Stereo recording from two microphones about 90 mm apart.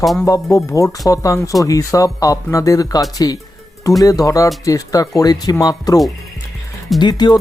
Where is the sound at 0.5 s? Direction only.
35° left (ahead or behind).